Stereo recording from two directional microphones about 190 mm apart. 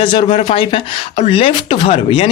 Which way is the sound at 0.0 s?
25° left (ahead or behind).